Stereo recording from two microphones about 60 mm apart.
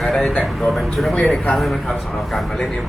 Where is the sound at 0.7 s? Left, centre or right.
Centre.